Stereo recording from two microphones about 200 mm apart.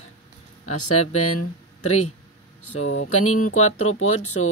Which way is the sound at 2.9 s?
85° left.